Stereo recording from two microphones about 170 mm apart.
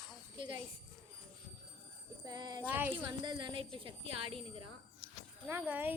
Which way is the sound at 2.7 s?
10° right (ahead or behind).